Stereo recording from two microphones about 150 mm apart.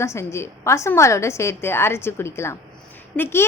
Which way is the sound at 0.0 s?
20° left (ahead or behind).